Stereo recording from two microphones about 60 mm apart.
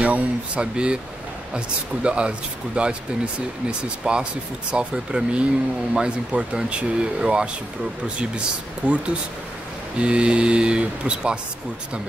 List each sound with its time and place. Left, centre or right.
0.0 s speech: centre
2.0 s speech: centre
8.8 s speech: centre